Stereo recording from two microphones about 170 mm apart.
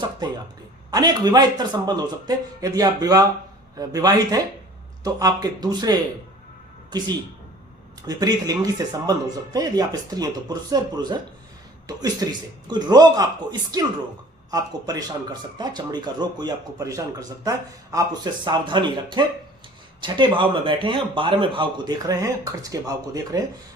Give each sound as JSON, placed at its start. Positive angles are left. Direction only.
{"t": 0.2, "sound": "speech", "side_deg": -25}